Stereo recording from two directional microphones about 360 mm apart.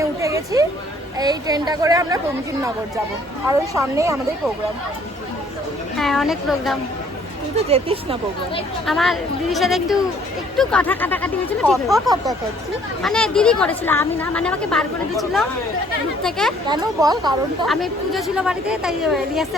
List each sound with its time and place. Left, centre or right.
0.0 s a sound: centre
1.2 s speech: centre
3.5 s speech: centre
6.0 s a woman's voice: centre
7.5 s speech: centre
8.9 s a woman's voice: centre
16.6 s speech: centre
17.7 s a woman's voice: centre